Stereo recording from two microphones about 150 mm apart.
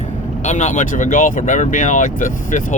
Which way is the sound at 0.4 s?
50° left (ahead or behind).